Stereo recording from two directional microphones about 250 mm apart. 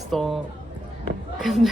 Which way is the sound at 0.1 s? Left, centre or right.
Centre.